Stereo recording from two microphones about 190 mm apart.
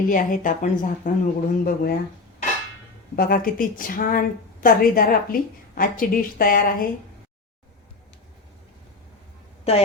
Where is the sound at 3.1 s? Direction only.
50° left (ahead or behind).